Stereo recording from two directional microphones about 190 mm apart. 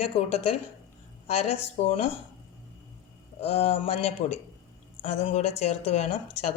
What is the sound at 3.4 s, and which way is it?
Speech, 30° left (ahead or behind).